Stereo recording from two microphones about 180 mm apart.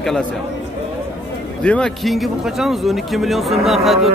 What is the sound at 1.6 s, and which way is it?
A man's voice, 5° left (ahead or behind).